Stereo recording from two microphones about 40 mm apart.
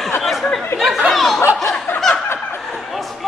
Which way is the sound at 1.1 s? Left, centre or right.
Centre.